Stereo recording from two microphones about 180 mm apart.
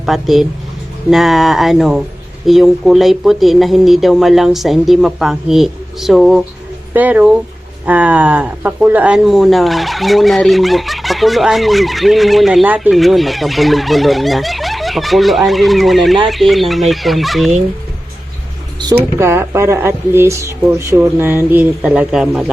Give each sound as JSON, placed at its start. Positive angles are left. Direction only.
{"t": 0.0, "sound": "speech", "side_deg": 0}
{"t": 19.2, "sound": "speech", "side_deg": -15}